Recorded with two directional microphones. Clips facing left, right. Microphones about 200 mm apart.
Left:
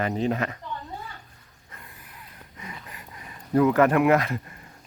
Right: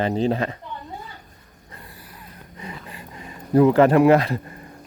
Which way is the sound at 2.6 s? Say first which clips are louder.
Right 5 dB; 30° right (ahead or behind).